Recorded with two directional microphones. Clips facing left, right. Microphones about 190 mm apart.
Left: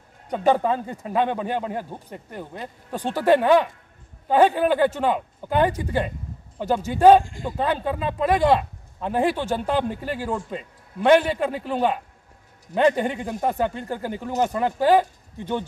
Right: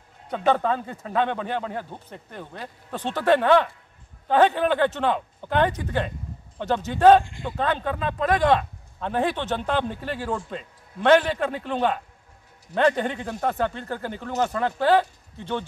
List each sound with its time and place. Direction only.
0.5 s a man's voice: 10° left (ahead or behind)
7.2 s speech: 40° left (ahead or behind)
7.5 s a man's voice: 10° left (ahead or behind)